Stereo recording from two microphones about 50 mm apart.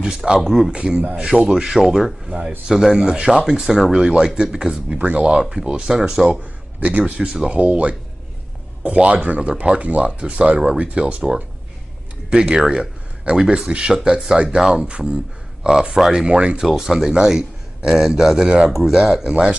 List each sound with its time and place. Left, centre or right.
0.0 s a man's voice: centre
0.4 s speech: centre
0.7 s a man's voice: centre
4.9 s a man's voice: right
5.4 s a man's voice: centre
6.8 s a man's voice: right
16.6 s a man's voice: centre